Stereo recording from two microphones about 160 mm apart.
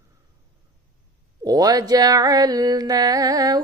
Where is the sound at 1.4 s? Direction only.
25° right (ahead or behind).